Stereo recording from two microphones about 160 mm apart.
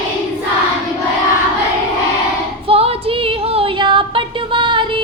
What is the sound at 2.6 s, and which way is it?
Female singing, 35° right (ahead or behind).